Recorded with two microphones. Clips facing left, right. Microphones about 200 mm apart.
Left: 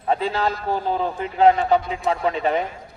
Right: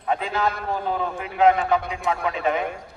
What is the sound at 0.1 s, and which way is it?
A man's voice, 35° left (ahead or behind).